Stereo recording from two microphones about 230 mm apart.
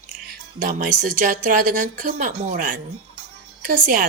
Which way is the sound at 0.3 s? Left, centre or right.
Right.